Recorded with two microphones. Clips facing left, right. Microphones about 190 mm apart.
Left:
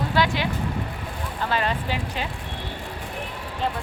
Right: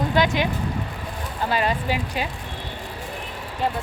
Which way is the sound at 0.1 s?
20° right (ahead or behind).